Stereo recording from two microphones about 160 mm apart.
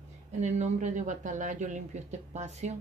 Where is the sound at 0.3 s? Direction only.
45° right (ahead or behind).